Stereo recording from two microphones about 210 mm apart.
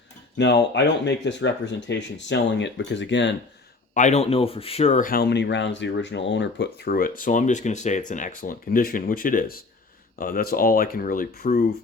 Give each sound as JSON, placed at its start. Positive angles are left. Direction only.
{"t": 0.3, "sound": "speech", "side_deg": 55}
{"t": 3.9, "sound": "speech", "side_deg": 35}